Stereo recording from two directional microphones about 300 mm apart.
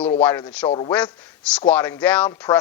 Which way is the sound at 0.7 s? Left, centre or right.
Centre.